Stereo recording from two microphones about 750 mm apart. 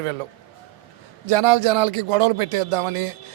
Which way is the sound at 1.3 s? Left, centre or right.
Right.